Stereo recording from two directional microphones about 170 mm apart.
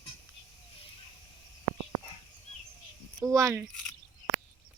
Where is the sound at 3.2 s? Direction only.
20° right (ahead or behind).